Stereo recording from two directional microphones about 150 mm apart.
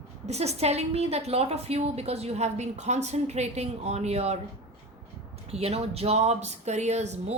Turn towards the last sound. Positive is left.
turn(degrees=-50)  # may be behind; listen again after turning